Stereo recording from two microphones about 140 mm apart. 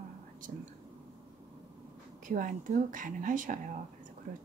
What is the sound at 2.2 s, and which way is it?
Speech, 70° right (ahead or behind).